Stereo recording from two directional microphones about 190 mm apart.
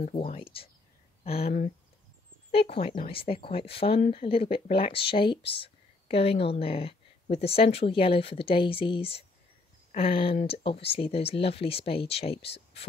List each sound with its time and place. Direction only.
0.0 s speech: 40° left (ahead or behind)
2.5 s a woman's voice: 30° left (ahead or behind)